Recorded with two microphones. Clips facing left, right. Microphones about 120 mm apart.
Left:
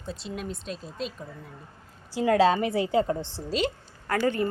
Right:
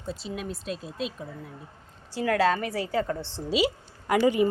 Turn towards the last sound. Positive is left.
turn(degrees=-15)  # may be behind; listen again after turning